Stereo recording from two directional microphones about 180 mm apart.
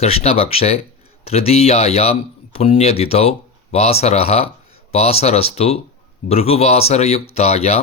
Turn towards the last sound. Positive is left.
turn(degrees=35)  # may be behind; listen again after turning